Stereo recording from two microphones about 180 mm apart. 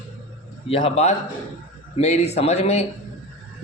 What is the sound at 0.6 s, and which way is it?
Speech, 35° left (ahead or behind).